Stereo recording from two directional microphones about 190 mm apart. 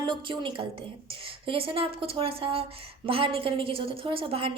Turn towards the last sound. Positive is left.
turn(degrees=-30)  # may be behind; listen again after turning